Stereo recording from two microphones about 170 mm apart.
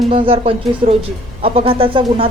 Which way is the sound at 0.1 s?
35° right (ahead or behind).